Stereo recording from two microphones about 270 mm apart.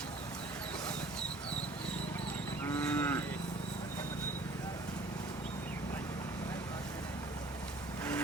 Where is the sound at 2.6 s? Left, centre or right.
Centre.